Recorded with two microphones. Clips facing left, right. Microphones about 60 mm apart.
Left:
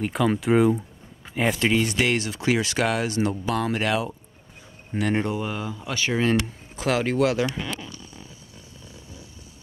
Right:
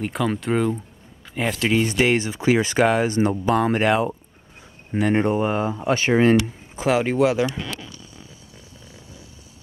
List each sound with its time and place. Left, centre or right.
0.0 s speech: centre
1.9 s speech: right
5.3 s speech: right
6.4 s speech: centre